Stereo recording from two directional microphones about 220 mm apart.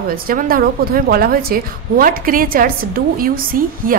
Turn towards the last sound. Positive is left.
turn(degrees=-40)  # may be behind; listen again after turning